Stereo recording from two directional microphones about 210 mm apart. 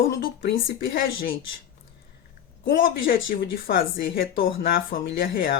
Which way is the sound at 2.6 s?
45° left (ahead or behind).